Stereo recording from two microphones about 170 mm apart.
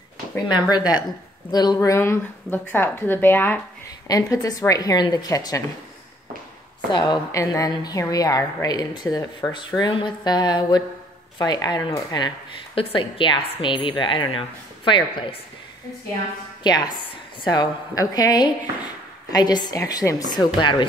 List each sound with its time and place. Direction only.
0.5 s a woman's voice: 25° left (ahead or behind)
6.9 s a woman's voice: 25° left (ahead or behind)
16.6 s a woman's voice: 25° left (ahead or behind)